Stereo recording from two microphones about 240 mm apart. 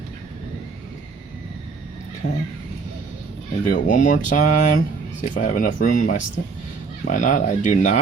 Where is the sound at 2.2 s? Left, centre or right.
Left.